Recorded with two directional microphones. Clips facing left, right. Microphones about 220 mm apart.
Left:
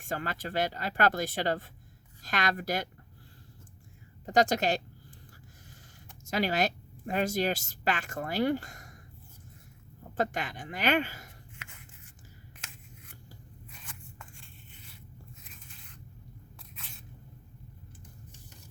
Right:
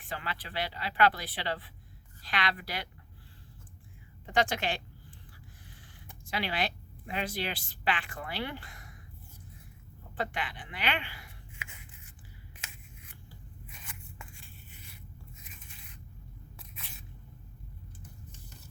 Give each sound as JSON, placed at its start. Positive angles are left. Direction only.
{"t": 0.0, "sound": "a woman's voice", "side_deg": 45}
{"t": 4.3, "sound": "a woman's voice", "side_deg": 40}
{"t": 6.2, "sound": "a woman's voice", "side_deg": 45}
{"t": 10.2, "sound": "a woman's voice", "side_deg": 45}
{"t": 13.7, "sound": "scissors", "side_deg": -10}